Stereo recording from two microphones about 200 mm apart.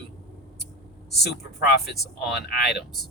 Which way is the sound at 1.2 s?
55° left (ahead or behind).